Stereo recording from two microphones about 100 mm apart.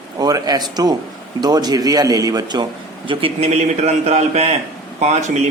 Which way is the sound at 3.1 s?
75° right (ahead or behind).